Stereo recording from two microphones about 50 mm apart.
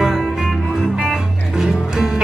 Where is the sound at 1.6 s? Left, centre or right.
Centre.